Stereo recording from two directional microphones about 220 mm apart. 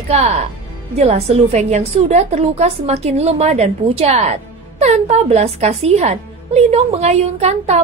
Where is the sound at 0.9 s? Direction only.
30° right (ahead or behind).